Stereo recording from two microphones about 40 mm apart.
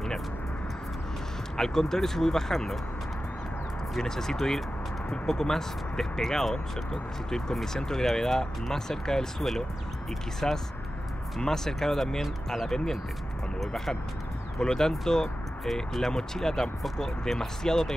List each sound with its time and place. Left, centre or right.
1.6 s speech: centre
4.0 s speech: centre
10.4 s speech: centre